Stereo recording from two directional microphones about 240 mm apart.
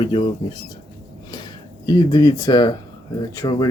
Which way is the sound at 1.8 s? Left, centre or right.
Centre.